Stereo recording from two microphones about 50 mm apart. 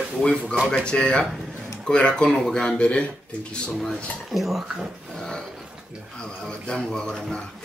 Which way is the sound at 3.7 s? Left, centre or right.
Centre.